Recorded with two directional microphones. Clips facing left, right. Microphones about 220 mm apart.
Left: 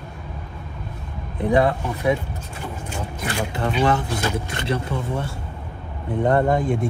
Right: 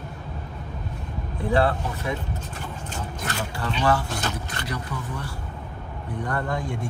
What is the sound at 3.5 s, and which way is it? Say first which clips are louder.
Speech: left 3 dB; 20° left (ahead or behind).